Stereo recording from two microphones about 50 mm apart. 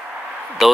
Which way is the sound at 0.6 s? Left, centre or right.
Centre.